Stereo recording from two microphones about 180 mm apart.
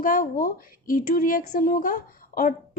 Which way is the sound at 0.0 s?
50° left (ahead or behind).